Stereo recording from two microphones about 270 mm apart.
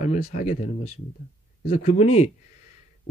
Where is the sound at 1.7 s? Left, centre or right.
Left.